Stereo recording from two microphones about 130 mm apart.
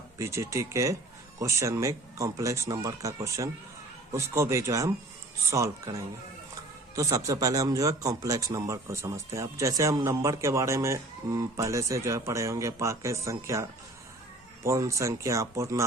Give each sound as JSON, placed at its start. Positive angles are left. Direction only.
{"t": 0.2, "sound": "speech", "side_deg": -20}